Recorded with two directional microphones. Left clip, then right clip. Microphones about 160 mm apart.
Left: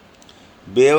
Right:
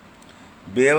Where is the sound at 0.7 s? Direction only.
30° left (ahead or behind).